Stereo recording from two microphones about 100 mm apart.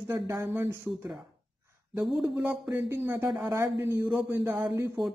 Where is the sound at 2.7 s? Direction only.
25° right (ahead or behind).